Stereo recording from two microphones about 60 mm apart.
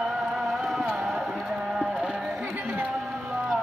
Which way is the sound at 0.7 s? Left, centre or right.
Centre.